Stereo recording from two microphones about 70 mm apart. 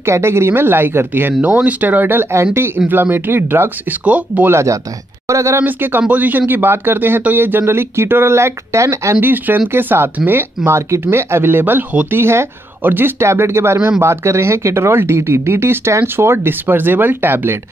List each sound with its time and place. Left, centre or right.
0.0 s speech: right
4.0 s speech: centre
4.5 s speech: right
5.6 s speech: right
9.2 s speech: right
12.2 s speech: right